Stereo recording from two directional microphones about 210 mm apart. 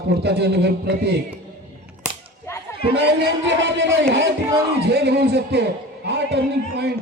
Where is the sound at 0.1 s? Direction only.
50° right (ahead or behind).